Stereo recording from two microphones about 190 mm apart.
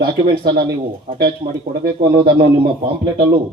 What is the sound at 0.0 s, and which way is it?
A man's voice, 55° right (ahead or behind).